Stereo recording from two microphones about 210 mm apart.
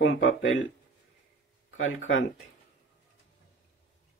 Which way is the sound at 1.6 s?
65° left (ahead or behind).